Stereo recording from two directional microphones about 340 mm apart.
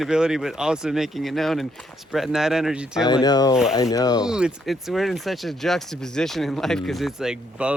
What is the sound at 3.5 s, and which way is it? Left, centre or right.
Speech, centre.